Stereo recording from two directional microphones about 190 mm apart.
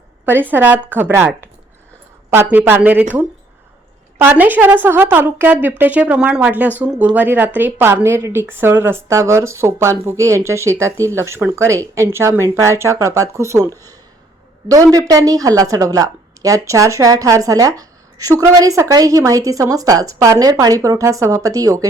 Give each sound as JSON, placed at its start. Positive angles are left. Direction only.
{"t": 0.3, "sound": "speech", "side_deg": -10}
{"t": 2.3, "sound": "speech", "side_deg": -10}
{"t": 14.7, "sound": "speech", "side_deg": -20}